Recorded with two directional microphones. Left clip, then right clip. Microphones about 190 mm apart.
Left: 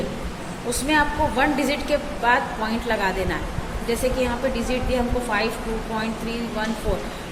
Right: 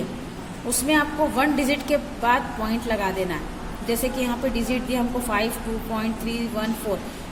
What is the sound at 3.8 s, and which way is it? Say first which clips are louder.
Speech: left 2 dB; 35° right (ahead or behind).